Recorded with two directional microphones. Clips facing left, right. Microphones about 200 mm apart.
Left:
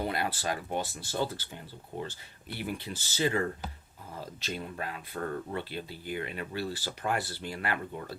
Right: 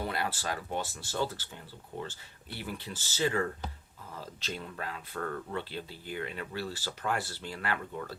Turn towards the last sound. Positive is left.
turn(degrees=15)  # may be behind; listen again after turning